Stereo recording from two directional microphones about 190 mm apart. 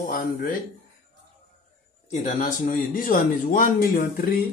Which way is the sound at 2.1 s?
40° left (ahead or behind).